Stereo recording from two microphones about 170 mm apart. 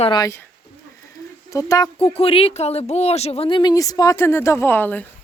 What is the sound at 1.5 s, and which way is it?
Speech, 20° left (ahead or behind).